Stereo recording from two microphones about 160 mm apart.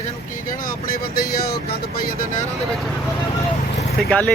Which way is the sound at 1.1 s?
70° left (ahead or behind).